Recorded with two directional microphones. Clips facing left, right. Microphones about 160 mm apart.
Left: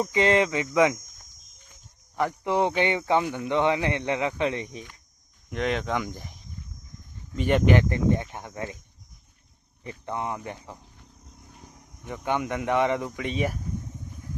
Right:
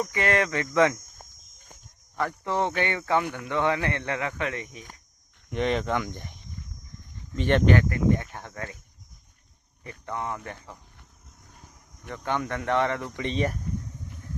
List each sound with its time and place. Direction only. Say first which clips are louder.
0.0 s speech: left 4 dB; 20° left (ahead or behind)
1.2 s a sound: right 7 dB; 50° right (ahead or behind)
2.1 s speech: left 3 dB; 15° left (ahead or behind)
5.5 s speech: right 1 dB; centre (ahead or behind)
7.8 s speech: even; 25° left (ahead or behind)
10.1 s speech: left 1 dB; 15° left (ahead or behind)
11.3 s cricket: left 3 dB; 20° left (ahead or behind)
13.1 s speech: even; 5° left (ahead or behind)